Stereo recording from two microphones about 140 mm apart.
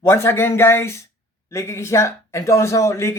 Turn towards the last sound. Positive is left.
turn(degrees=20)  # may be behind; listen again after turning